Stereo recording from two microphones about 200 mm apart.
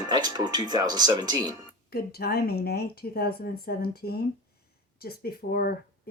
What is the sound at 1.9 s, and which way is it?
A woman's voice, 50° left (ahead or behind).